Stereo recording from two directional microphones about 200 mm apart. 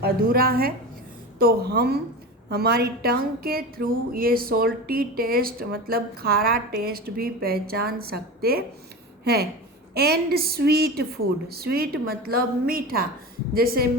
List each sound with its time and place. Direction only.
0.0 s speech: 50° right (ahead or behind)